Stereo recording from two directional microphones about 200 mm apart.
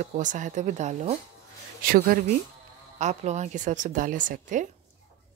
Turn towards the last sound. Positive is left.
turn(degrees=-40)  # may be behind; listen again after turning